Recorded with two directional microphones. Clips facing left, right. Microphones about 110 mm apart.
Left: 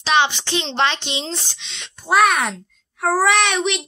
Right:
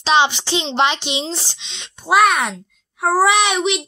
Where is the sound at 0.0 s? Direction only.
20° right (ahead or behind).